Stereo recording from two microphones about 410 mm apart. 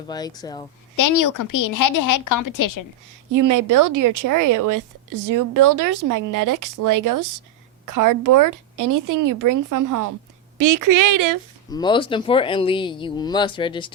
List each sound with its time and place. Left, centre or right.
0.1 s speech: centre
0.9 s a woman's voice: left
3.3 s speech: right
11.7 s speech: centre